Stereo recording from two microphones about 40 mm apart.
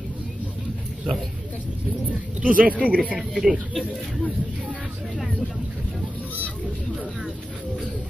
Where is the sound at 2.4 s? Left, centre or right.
Right.